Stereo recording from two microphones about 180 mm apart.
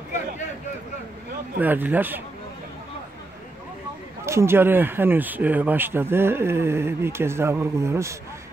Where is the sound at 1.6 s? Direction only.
10° right (ahead or behind).